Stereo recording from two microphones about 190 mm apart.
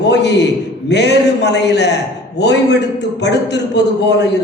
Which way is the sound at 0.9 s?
65° left (ahead or behind).